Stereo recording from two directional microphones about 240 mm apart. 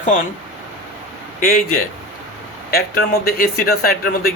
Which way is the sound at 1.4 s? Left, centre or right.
Left.